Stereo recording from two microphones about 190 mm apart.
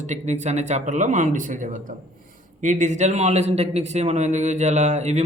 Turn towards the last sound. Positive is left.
turn(degrees=-35)  # may be behind; listen again after turning